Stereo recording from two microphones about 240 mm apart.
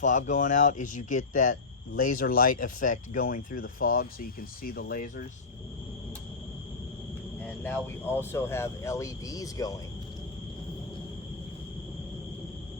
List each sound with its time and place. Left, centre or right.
0.0 s speech: left
7.4 s speech: centre